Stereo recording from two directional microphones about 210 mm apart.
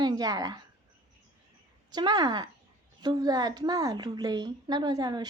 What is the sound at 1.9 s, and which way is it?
Speech, 20° right (ahead or behind).